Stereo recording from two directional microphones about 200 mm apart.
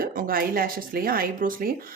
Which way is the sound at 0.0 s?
45° right (ahead or behind).